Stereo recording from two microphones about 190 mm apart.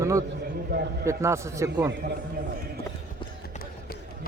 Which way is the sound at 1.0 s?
15° right (ahead or behind).